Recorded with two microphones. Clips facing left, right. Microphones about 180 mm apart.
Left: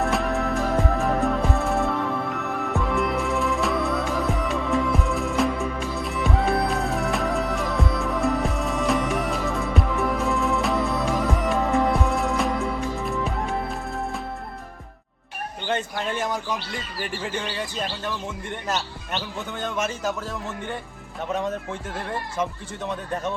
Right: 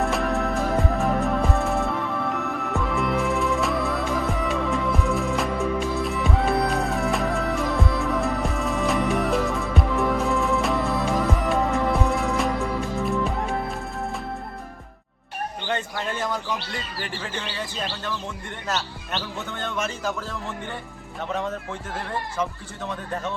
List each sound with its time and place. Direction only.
0.0 s music: centre (ahead or behind)
15.7 s a sound: 15° left (ahead or behind)
19.5 s a man's voice: 10° left (ahead or behind)